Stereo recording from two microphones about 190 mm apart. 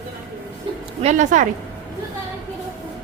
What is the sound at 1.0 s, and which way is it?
Speech, 40° right (ahead or behind).